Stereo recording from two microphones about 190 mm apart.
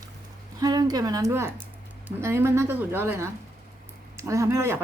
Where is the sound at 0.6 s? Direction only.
20° right (ahead or behind).